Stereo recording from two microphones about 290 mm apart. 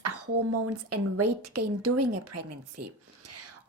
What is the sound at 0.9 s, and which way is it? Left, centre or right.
A woman's voice, right.